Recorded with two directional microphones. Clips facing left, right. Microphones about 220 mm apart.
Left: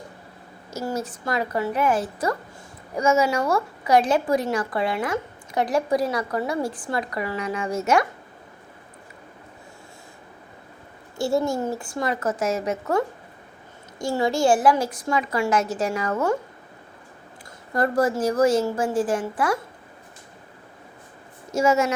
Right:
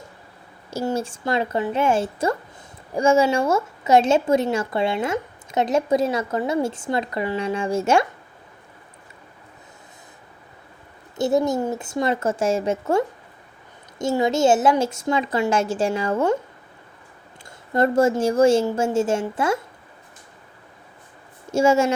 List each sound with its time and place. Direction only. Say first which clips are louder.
0.7 s a woman's voice: right 4 dB; 30° right (ahead or behind)
11.2 s a woman's voice: right 3 dB; 20° right (ahead or behind)
17.7 s a woman's voice: right 3 dB; 25° right (ahead or behind)
21.5 s a woman's voice: right 3 dB; 30° right (ahead or behind)